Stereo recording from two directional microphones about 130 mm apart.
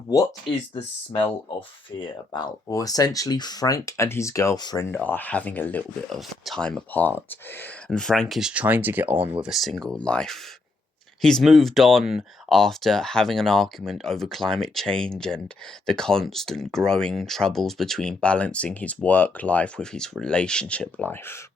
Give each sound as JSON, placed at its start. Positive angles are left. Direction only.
{"t": 0.7, "sound": "speech", "side_deg": 45}
{"t": 2.3, "sound": "speech", "side_deg": 30}
{"t": 4.9, "sound": "speech", "side_deg": 15}
{"t": 6.1, "sound": "speech", "side_deg": 0}
{"t": 9.4, "sound": "speech", "side_deg": 0}